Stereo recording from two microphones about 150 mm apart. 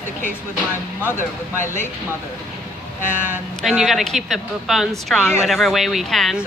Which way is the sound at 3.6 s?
Centre (ahead or behind).